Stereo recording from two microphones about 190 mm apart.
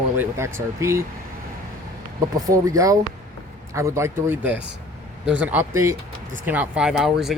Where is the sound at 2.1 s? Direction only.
20° right (ahead or behind).